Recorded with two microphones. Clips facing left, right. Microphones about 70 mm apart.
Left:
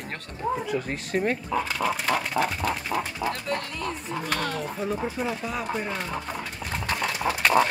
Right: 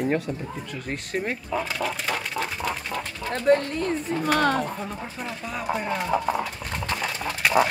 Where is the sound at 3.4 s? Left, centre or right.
Right.